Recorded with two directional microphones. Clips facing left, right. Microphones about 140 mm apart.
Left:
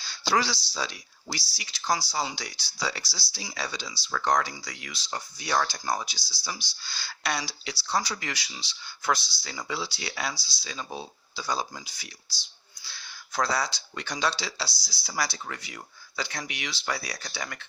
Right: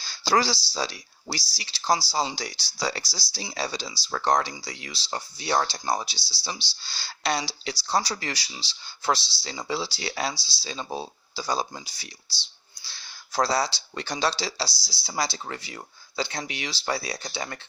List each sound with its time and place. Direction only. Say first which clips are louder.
0.0 s speech: right 3 dB; 35° right (ahead or behind)